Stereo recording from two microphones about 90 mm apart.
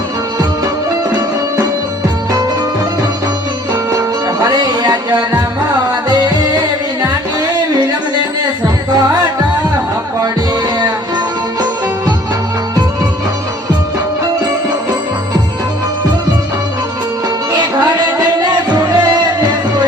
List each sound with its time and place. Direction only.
4.4 s music: 45° right (ahead or behind)
18.7 s music: 55° right (ahead or behind)